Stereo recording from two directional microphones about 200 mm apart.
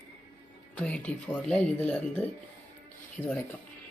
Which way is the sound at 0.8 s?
5° left (ahead or behind).